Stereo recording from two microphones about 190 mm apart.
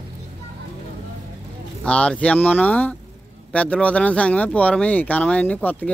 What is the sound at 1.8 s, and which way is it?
Speech, 5° left (ahead or behind).